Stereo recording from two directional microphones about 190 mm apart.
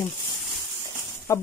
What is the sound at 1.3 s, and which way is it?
Speech, 15° left (ahead or behind).